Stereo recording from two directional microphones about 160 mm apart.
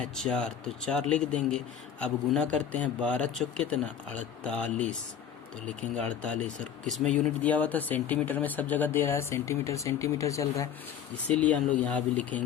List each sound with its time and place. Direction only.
0.0 s a man's voice: 5° left (ahead or behind)
11.3 s a man's voice: 10° left (ahead or behind)